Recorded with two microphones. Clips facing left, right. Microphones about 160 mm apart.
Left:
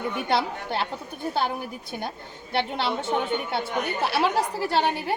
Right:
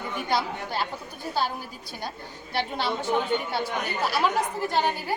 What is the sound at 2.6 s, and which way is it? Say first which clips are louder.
A woman's voice: left 2 dB; 25° left (ahead or behind).